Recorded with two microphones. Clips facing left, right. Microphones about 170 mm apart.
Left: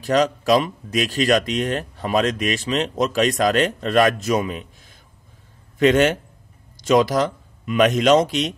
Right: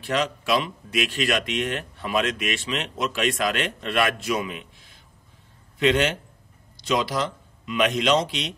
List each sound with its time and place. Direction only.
0.0 s a man's voice: 40° left (ahead or behind)